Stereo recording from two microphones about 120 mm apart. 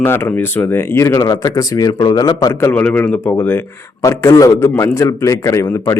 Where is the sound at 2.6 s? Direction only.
15° left (ahead or behind).